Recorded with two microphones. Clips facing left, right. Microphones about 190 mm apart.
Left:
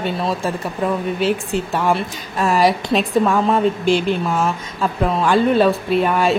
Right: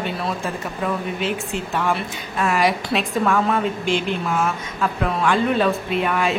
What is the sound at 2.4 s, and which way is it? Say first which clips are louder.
Speech: left 4 dB; 30° left (ahead or behind).